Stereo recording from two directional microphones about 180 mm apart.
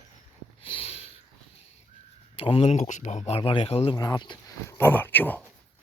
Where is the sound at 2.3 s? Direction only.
30° left (ahead or behind).